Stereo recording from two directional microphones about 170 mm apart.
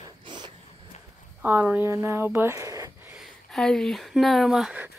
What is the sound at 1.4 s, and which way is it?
A woman's voice, 10° right (ahead or behind).